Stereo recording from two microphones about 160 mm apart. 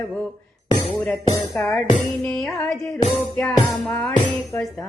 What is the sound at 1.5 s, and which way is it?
Music, centre (ahead or behind).